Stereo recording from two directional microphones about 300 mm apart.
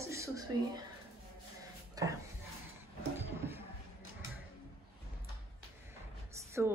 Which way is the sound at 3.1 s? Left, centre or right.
Centre.